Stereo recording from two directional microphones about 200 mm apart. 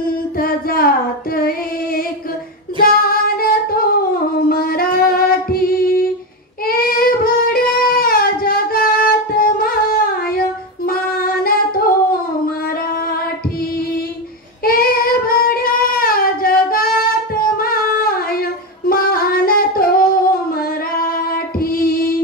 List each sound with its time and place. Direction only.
0.4 s music: 45° left (ahead or behind)
2.8 s child singing: 45° left (ahead or behind)
4.5 s music: 50° left (ahead or behind)
6.6 s child singing: 45° left (ahead or behind)
10.9 s singing: 45° left (ahead or behind)
14.6 s child singing: 45° left (ahead or behind)
17.4 s singing: 45° left (ahead or behind)
20.5 s female singing: 50° left (ahead or behind)